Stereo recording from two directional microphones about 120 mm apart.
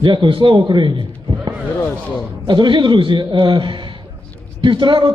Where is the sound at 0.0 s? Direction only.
40° right (ahead or behind).